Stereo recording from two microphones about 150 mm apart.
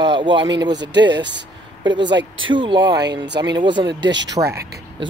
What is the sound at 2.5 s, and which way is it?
Speech, 30° right (ahead or behind).